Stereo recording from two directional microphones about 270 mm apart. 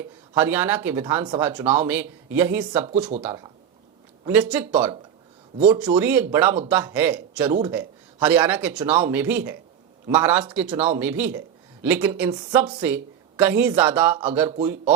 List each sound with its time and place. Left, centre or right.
0.3 s speech: centre
2.8 s speech: right; by 4.8 s centre
5.5 s speech: centre
6.0 s speech: centre
14.5 s speech: centre